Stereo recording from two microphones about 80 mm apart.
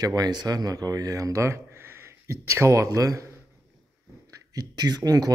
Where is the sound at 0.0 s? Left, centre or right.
Right.